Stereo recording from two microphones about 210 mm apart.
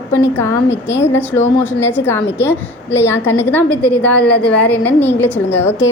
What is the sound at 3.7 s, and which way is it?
Speech, 15° right (ahead or behind).